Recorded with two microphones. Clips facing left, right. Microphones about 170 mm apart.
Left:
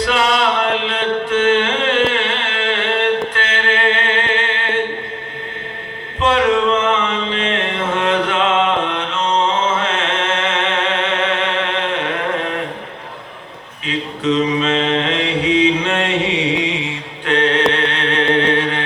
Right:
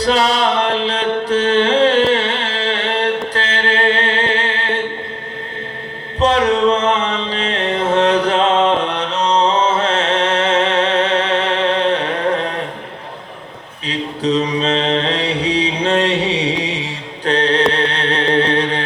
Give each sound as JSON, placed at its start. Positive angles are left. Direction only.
{"t": 0.0, "sound": "music", "side_deg": -35}
{"t": 6.1, "sound": "music", "side_deg": -35}
{"t": 13.8, "sound": "mantra", "side_deg": -35}
{"t": 17.7, "sound": "music", "side_deg": -35}